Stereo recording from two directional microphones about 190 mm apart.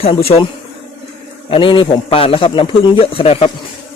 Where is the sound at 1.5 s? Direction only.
25° left (ahead or behind).